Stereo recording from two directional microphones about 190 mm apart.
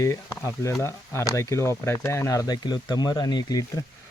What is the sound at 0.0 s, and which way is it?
Speech, 15° left (ahead or behind).